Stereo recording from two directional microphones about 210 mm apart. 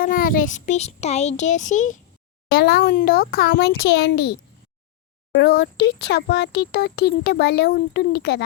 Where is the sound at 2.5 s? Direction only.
50° left (ahead or behind).